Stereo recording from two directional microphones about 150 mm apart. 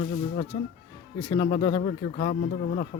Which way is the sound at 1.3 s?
35° left (ahead or behind).